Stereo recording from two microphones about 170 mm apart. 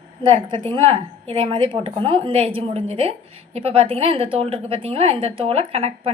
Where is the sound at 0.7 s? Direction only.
30° right (ahead or behind).